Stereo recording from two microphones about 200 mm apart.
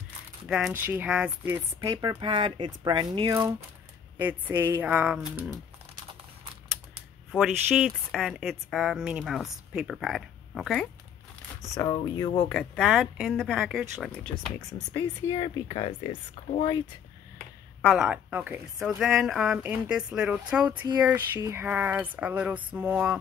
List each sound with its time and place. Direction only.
0.5 s speech: centre (ahead or behind)
1.8 s a woman's voice: 20° right (ahead or behind)
7.3 s speech: centre (ahead or behind)
11.7 s speech: 20° left (ahead or behind)
12.4 s speech: 5° left (ahead or behind)
15.0 s speech: 20° left (ahead or behind)
17.8 s speech: 5° right (ahead or behind)